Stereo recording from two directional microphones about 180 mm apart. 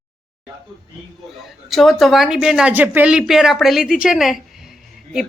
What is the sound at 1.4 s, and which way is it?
A woman's voice, centre (ahead or behind).